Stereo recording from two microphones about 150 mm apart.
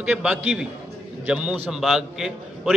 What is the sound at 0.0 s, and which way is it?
A man's voice, 5° right (ahead or behind).